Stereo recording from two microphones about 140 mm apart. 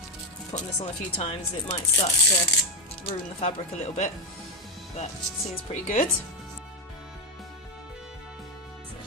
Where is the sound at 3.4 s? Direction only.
50° left (ahead or behind).